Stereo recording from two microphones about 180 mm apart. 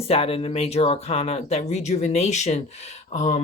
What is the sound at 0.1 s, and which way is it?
Speech, 30° left (ahead or behind).